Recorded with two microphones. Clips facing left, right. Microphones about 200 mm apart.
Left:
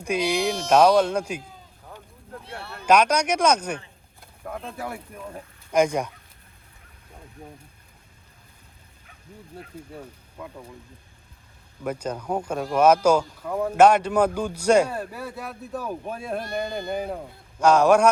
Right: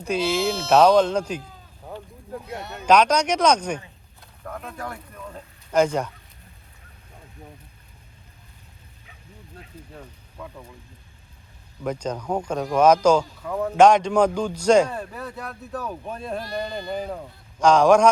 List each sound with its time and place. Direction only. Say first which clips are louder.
0.0 s speech: right 1 dB; 15° left (ahead or behind)
2.8 s speech: right 1 dB; 10° left (ahead or behind)
10.0 s speech: left 1 dB; 10° left (ahead or behind)
11.8 s speech: right 1 dB; 5° left (ahead or behind)